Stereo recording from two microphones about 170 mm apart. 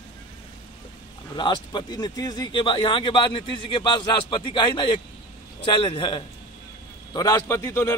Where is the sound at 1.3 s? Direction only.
25° left (ahead or behind).